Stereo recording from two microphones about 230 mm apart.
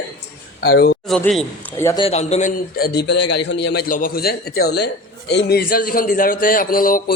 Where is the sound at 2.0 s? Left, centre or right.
Left.